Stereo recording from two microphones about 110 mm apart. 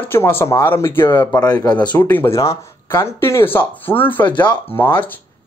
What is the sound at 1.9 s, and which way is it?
Speech, 15° left (ahead or behind).